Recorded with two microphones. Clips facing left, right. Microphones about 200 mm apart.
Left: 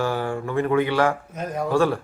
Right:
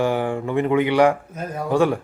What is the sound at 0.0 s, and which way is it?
Speech, 20° right (ahead or behind).